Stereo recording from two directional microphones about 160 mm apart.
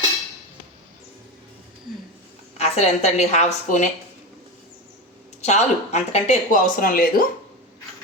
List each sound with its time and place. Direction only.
2.6 s speech: 40° left (ahead or behind)
5.4 s speech: 45° left (ahead or behind); by 7.3 s 65° left (ahead or behind)